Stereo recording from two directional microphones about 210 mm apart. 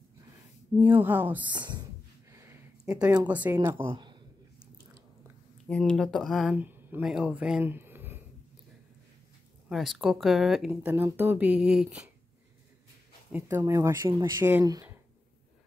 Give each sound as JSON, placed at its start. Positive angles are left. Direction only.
{"t": 1.0, "sound": "speech", "side_deg": -10}
{"t": 1.5, "sound": "speech", "side_deg": -20}
{"t": 2.3, "sound": "a sound", "side_deg": -10}
{"t": 3.3, "sound": "speech", "side_deg": -5}
{"t": 3.9, "sound": "a sound", "side_deg": -20}
{"t": 5.7, "sound": "speech", "side_deg": 5}
{"t": 9.7, "sound": "speech", "side_deg": 0}
{"t": 13.6, "sound": "speech", "side_deg": -15}